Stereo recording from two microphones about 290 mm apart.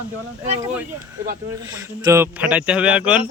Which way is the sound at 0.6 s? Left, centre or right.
Centre.